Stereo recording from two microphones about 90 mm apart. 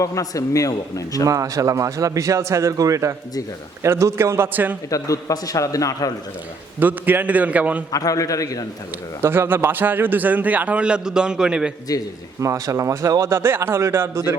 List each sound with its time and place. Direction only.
0.0 s a man's voice: 40° left (ahead or behind)
1.2 s a man's voice: 40° right (ahead or behind); by 4.8 s 20° right (ahead or behind)
4.9 s a man's voice: 40° left (ahead or behind)
6.7 s a man's voice: 20° right (ahead or behind)
7.9 s a man's voice: 40° left (ahead or behind)
9.2 s a man's voice: 25° right (ahead or behind); by 11.7 s 10° right (ahead or behind)
11.9 s a man's voice: 40° left (ahead or behind)
12.4 s speech: 35° right (ahead or behind)